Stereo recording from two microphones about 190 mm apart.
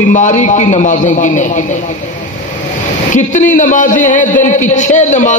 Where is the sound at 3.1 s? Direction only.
40° left (ahead or behind).